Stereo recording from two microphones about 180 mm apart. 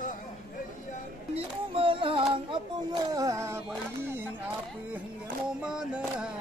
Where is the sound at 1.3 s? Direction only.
30° right (ahead or behind).